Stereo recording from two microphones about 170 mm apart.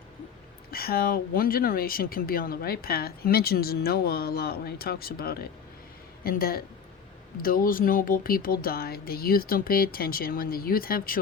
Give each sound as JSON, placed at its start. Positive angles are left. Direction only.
{"t": 0.7, "sound": "speech", "side_deg": 65}